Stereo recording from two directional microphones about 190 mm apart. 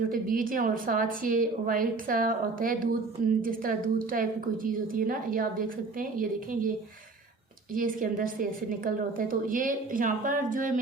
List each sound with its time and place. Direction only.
0.1 s a woman's voice: 45° right (ahead or behind)
7.7 s a woman's voice: 45° right (ahead or behind)